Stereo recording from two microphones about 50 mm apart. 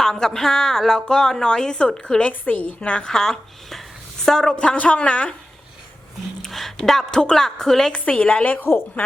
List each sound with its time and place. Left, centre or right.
0.0 s a woman's voice: centre; by 3.1 s left
3.1 s a woman's voice: centre
6.4 s a woman's voice: centre
7.9 s speech: left
9.0 s speech: left